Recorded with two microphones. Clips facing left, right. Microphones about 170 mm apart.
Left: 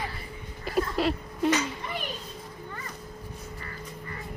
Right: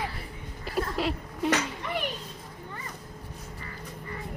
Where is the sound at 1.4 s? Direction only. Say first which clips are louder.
Left 1 dB; 65° right (ahead or behind).